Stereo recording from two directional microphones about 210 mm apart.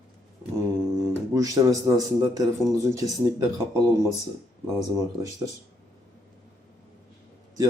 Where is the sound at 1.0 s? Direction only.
15° right (ahead or behind).